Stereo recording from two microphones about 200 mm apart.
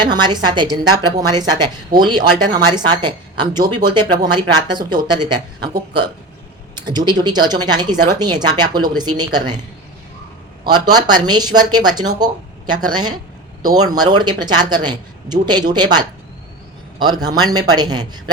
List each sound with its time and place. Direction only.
0.0 s speech: 20° right (ahead or behind)
6.8 s speech: 20° right (ahead or behind)
10.6 s speech: 20° right (ahead or behind)